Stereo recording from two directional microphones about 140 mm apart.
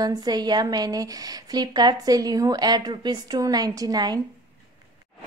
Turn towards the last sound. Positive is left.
turn(degrees=-30)  # may be behind; listen again after turning